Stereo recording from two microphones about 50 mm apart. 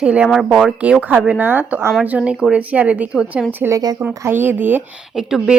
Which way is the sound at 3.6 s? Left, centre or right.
Right.